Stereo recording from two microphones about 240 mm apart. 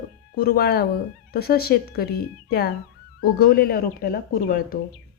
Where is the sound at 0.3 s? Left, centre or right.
Left.